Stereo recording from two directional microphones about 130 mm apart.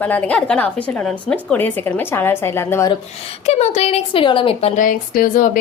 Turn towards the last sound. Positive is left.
turn(degrees=90)